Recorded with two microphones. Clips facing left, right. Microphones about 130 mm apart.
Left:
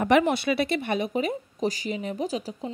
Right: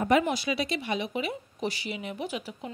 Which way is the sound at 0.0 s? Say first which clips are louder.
Left 3 dB; 75° left (ahead or behind).